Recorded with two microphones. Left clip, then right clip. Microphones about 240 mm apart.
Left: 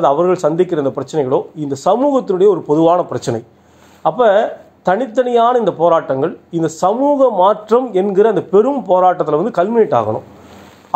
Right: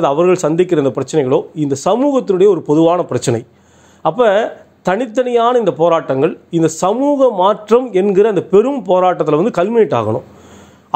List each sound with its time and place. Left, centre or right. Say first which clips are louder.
0.0 s speech: even; right